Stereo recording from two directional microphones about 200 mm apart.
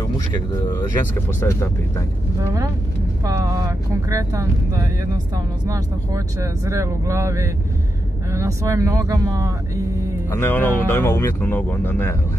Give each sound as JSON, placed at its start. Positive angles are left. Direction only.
{"t": 1.4, "sound": "speech", "side_deg": 15}
{"t": 3.3, "sound": "speech", "side_deg": -15}
{"t": 10.3, "sound": "speech", "side_deg": 10}